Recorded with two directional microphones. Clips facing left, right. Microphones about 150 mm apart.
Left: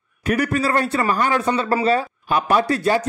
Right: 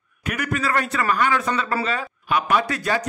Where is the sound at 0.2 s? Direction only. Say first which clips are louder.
Left 6 dB; 35° left (ahead or behind).